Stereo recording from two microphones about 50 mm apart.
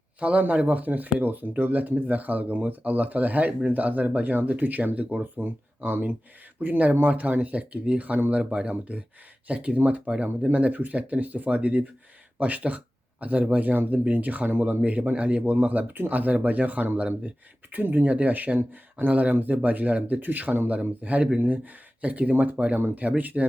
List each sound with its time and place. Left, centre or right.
0.2 s speech: right
5.4 s speech: right